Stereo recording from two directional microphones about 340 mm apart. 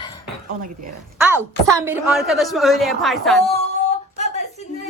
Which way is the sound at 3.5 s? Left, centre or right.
Centre.